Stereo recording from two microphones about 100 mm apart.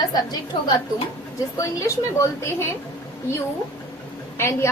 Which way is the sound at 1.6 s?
30° left (ahead or behind).